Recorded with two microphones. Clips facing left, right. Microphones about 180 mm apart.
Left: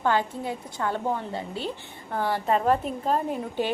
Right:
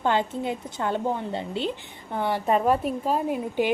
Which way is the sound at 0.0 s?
20° right (ahead or behind).